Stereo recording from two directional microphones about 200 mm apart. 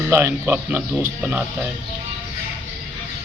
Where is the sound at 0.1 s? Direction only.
10° right (ahead or behind).